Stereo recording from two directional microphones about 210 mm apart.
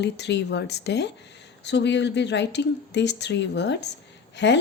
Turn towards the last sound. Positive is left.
turn(degrees=55)  # may be behind; listen again after turning